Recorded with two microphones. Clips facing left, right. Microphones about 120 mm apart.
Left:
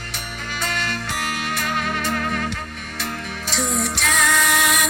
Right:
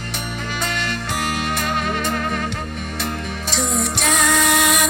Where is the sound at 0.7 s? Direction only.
20° right (ahead or behind).